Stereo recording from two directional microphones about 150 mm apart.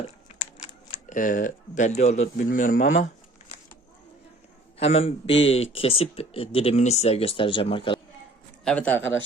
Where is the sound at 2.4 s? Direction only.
65° left (ahead or behind).